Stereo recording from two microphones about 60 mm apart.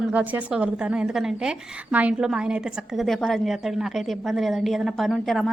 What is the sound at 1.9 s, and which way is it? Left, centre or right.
Speech, right.